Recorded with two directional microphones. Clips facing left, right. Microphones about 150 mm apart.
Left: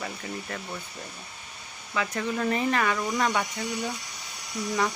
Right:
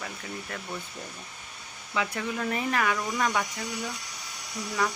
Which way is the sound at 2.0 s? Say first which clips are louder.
Even; 15° right (ahead or behind).